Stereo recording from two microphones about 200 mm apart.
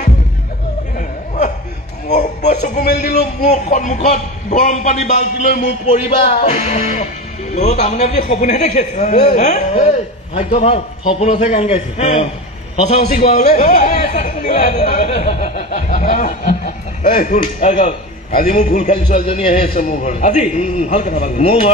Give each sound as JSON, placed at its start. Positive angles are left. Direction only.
{"t": 0.9, "sound": "a sound", "side_deg": 35}
{"t": 2.1, "sound": "music", "side_deg": 35}
{"t": 2.8, "sound": "speech", "side_deg": 50}
{"t": 3.2, "sound": "a man's voice", "side_deg": 35}
{"t": 19.7, "sound": "a man's voice", "side_deg": 45}